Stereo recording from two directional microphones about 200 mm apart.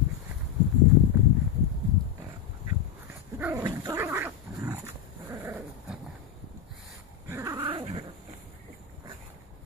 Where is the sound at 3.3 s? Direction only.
10° right (ahead or behind).